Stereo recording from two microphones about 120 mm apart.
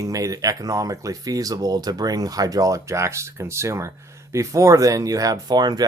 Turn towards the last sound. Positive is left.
turn(degrees=-35)  # may be behind; listen again after turning